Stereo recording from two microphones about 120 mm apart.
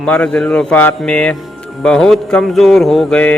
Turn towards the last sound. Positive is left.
turn(degrees=5)  # may be behind; listen again after turning